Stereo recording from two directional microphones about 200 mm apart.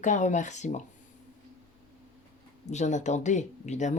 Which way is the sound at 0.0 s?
35° left (ahead or behind).